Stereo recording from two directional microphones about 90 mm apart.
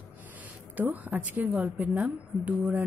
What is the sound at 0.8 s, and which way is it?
Speech, 20° right (ahead or behind).